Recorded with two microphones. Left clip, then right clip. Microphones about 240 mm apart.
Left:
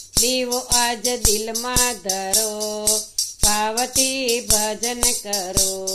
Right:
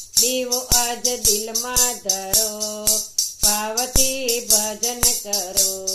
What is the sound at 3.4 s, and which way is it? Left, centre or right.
Music, left.